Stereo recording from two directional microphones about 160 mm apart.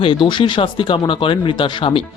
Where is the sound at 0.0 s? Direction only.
30° left (ahead or behind).